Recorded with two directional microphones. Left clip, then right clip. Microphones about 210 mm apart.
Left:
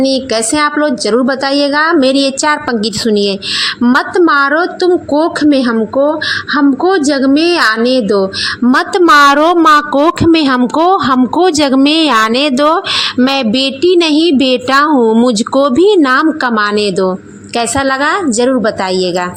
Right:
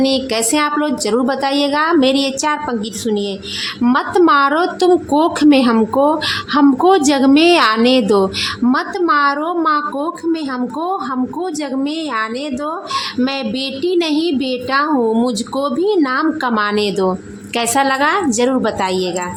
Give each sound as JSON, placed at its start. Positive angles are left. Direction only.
{"t": 0.0, "sound": "a woman's voice", "side_deg": 15}
{"t": 3.8, "sound": "a woman's voice", "side_deg": 10}
{"t": 8.7, "sound": "a woman's voice", "side_deg": 30}